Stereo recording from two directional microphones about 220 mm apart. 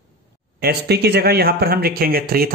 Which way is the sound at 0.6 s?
45° right (ahead or behind).